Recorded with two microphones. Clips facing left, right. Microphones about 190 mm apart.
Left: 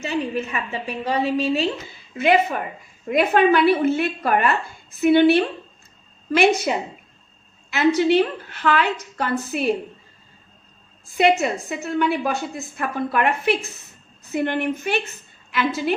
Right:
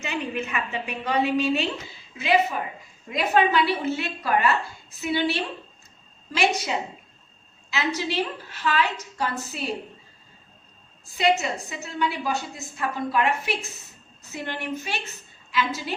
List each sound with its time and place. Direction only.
0.0 s a woman's voice: 35° left (ahead or behind)
2.1 s a woman's voice: 55° left (ahead or behind)
6.7 s a woman's voice: 55° left (ahead or behind)
11.2 s a woman's voice: 55° left (ahead or behind)